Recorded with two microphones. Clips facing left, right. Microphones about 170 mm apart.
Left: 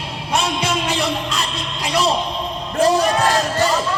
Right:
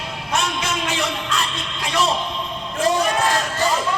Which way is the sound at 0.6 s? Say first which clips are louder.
Left 3 dB; 35° left (ahead or behind).